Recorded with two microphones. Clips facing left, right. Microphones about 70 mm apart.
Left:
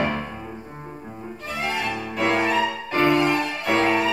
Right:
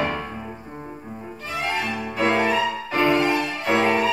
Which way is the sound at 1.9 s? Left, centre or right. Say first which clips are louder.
Right 1 dB; centre.